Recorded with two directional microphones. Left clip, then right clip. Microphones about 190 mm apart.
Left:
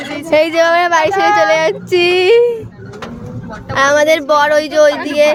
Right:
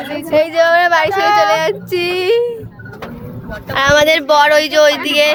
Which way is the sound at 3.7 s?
10° left (ahead or behind).